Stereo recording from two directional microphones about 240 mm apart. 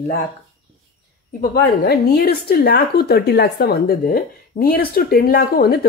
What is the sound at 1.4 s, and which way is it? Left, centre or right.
A woman's voice, left.